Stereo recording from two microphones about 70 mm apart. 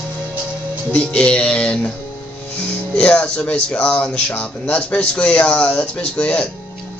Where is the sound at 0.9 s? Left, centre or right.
Centre.